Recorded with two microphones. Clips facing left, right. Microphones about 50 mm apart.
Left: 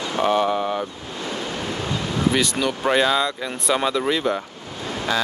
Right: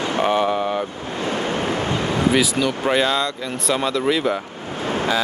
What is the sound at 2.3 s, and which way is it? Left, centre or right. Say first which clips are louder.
Speech: right 3 dB; centre.